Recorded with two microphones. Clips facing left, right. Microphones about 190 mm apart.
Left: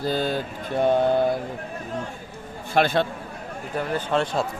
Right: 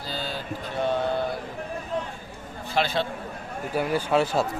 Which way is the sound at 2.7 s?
55° left (ahead or behind).